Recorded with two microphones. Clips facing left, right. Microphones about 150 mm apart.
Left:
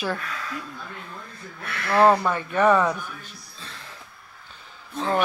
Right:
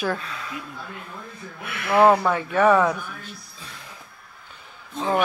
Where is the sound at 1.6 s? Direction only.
15° right (ahead or behind).